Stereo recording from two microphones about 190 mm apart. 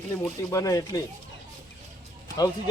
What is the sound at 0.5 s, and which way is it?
Speech, 20° left (ahead or behind).